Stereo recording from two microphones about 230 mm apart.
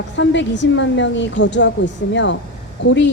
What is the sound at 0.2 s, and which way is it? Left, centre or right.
Speech, left.